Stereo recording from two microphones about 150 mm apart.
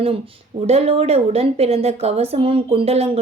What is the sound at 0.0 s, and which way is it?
A woman's voice, 40° right (ahead or behind).